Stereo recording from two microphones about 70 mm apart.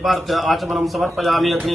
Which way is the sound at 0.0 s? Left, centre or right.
Centre.